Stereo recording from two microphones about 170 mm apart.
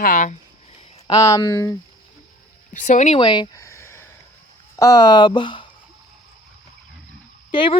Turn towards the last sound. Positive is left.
turn(degrees=30)  # may be behind; listen again after turning